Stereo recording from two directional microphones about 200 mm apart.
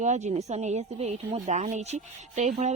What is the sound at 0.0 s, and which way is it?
A woman's voice, 35° right (ahead or behind).